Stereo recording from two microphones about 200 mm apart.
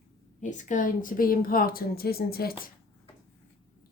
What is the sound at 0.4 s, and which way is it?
A woman's voice, 40° left (ahead or behind).